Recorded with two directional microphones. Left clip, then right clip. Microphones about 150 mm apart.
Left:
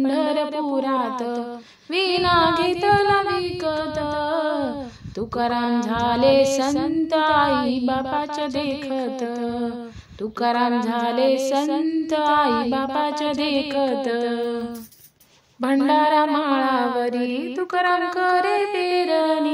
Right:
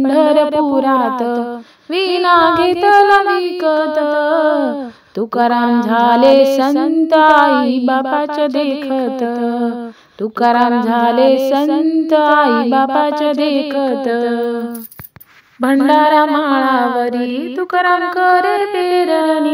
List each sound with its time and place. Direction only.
0.0 s female singing: 50° right (ahead or behind)
15.6 s mantra: 35° right (ahead or behind)